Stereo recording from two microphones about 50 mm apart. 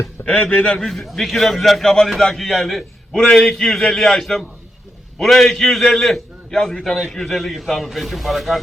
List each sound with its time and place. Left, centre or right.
0.2 s a man's voice: left
0.6 s a man's voice: centre
0.9 s a man's voice: centre